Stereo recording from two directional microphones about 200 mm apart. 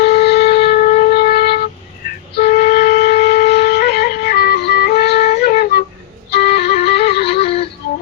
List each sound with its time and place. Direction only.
0.0 s a sound: 55° left (ahead or behind)
0.9 s wind instrument: 40° left (ahead or behind)
6.3 s music: 55° left (ahead or behind)
7.3 s music: 30° left (ahead or behind)